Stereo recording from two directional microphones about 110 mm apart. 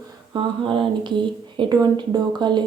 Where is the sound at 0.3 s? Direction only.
50° right (ahead or behind).